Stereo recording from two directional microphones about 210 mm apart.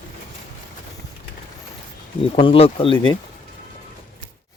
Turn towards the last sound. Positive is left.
turn(degrees=20)  # may be behind; listen again after turning